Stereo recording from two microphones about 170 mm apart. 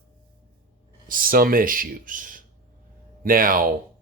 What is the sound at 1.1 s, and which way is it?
Speech, 55° right (ahead or behind).